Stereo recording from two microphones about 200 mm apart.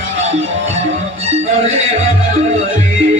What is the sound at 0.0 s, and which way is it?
Music, 70° right (ahead or behind).